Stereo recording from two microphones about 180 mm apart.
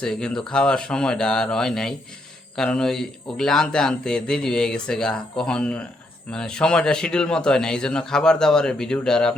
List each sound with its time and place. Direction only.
0.0 s speech: 5° left (ahead or behind)